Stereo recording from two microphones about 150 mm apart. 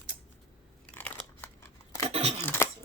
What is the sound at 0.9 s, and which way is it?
Crunch, 10° left (ahead or behind).